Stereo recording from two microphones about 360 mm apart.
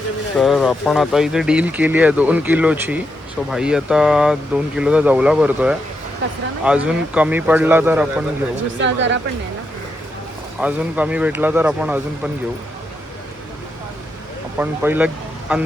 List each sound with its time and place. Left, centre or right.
0.3 s speech: centre
8.8 s speech: right
10.6 s speech: centre
14.6 s speech: centre